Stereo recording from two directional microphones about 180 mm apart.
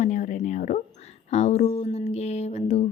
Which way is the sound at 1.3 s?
35° left (ahead or behind).